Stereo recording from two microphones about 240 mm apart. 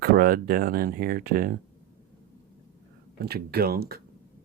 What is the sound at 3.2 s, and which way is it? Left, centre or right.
Speech, right.